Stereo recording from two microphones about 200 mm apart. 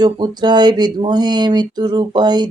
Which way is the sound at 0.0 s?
20° right (ahead or behind).